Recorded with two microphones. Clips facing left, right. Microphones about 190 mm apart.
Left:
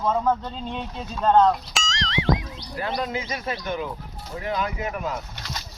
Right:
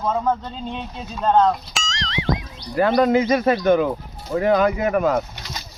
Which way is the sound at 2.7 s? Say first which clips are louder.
Right 12 dB; 60° right (ahead or behind).